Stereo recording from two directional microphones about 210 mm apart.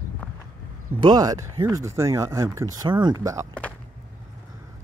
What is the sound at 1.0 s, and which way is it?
Speech, 20° right (ahead or behind).